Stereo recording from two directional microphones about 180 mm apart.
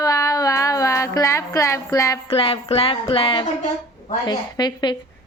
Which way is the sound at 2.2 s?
30° left (ahead or behind).